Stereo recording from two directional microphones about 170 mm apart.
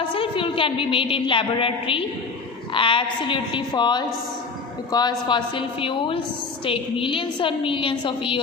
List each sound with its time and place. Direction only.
0.0 s a woman's voice: 30° left (ahead or behind)